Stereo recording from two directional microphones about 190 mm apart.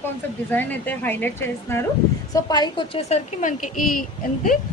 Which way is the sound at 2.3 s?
20° left (ahead or behind).